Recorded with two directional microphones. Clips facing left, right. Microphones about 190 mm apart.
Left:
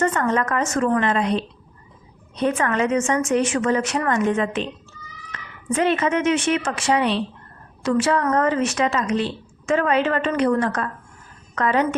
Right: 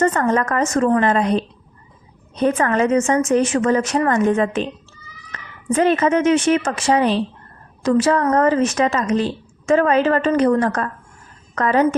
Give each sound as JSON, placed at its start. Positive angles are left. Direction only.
{"t": 0.0, "sound": "a woman's voice", "side_deg": -40}